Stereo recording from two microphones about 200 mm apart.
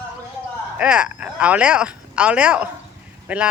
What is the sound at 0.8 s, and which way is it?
Speech, 5° right (ahead or behind).